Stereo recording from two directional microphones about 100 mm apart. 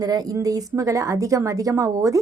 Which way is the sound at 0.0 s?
40° right (ahead or behind).